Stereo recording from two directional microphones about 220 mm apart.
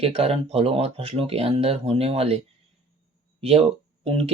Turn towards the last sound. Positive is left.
turn(degrees=-25)  # may be behind; listen again after turning